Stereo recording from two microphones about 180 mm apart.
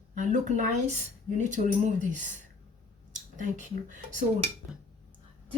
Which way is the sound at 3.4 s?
45° right (ahead or behind).